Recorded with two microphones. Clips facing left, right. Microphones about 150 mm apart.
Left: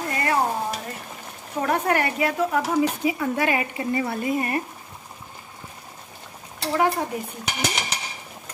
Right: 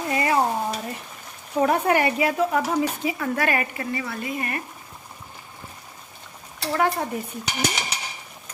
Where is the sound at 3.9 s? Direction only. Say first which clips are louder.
Left 5 dB; 30° left (ahead or behind).